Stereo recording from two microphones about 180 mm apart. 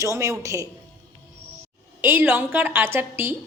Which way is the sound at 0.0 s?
15° right (ahead or behind).